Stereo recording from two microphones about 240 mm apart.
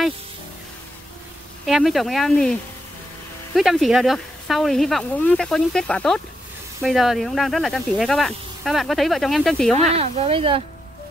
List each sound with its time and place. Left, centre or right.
1.7 s speech: centre
9.9 s speech: right